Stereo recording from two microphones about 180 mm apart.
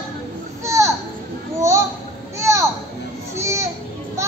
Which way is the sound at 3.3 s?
15° right (ahead or behind).